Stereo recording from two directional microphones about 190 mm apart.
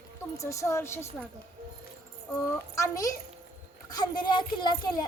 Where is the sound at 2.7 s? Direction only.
15° left (ahead or behind).